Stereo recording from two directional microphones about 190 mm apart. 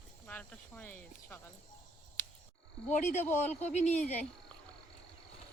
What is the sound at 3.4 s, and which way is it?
Speech, 35° left (ahead or behind).